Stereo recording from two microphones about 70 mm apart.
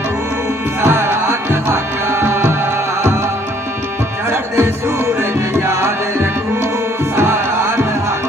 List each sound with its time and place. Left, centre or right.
0.8 s music: right
4.3 s music: right
5.5 s tabla: right